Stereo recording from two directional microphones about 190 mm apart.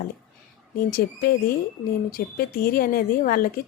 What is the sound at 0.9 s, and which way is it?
Speech, 50° left (ahead or behind).